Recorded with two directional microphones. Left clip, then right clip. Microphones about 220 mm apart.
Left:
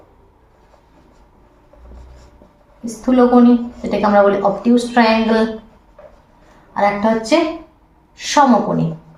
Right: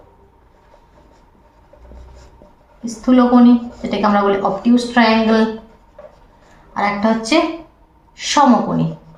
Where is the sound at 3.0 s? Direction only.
15° left (ahead or behind).